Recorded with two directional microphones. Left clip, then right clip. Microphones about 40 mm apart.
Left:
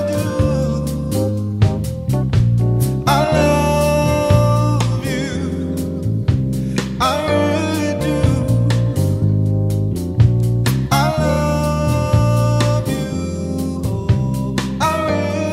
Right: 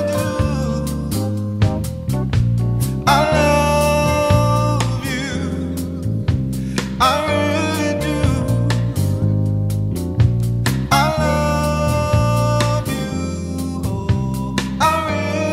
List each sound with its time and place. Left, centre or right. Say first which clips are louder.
0.0 s music: left 1 dB; right
3.1 s music: right 1 dB; right
7.0 s music: right 1 dB; right
11.1 s music: even; right
14.8 s music: right 1 dB; right